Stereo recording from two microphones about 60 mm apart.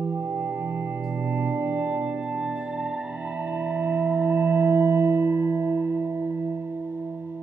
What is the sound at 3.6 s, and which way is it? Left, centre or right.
Singing bowl, right.